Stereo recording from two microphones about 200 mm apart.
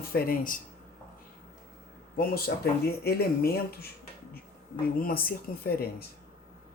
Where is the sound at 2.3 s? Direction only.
50° left (ahead or behind).